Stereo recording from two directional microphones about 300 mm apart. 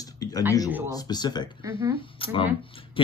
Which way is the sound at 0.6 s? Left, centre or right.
Centre.